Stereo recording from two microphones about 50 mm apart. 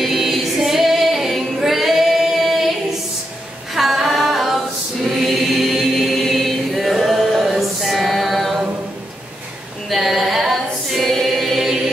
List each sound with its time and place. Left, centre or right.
0.0 s female singing: centre
3.7 s a capella: centre
5.2 s choir: centre
6.7 s a capella: centre
9.8 s choir: centre